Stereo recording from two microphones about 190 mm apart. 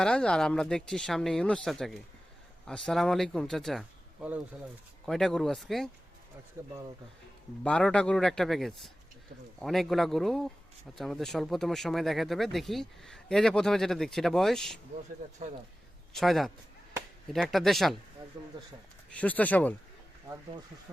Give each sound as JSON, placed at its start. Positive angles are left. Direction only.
{"t": 0.0, "sound": "speech", "side_deg": 5}
{"t": 6.6, "sound": "speech", "side_deg": -15}
{"t": 7.6, "sound": "speech", "side_deg": 5}
{"t": 16.1, "sound": "speech", "side_deg": 0}
{"t": 18.3, "sound": "speech", "side_deg": -25}
{"t": 19.1, "sound": "speech", "side_deg": 5}